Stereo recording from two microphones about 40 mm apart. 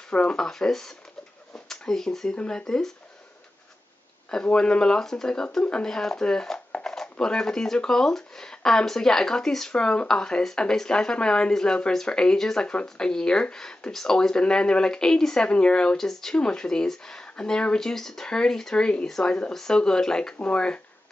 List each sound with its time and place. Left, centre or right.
0.1 s speech: left
0.5 s speech: centre
4.6 s speech: left
16.0 s speech: centre
16.3 s speech: left
17.7 s speech: centre; by 20.8 s left